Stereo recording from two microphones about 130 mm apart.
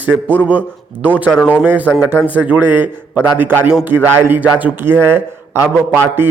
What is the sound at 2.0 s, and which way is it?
A man's voice, 10° right (ahead or behind).